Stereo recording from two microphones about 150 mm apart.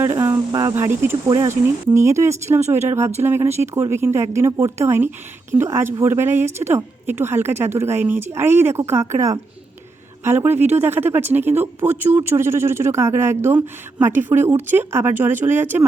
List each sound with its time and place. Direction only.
0.0 s a woman's voice: 15° right (ahead or behind)
2.6 s speech: 50° right (ahead or behind)
3.2 s a woman's voice: 15° right (ahead or behind)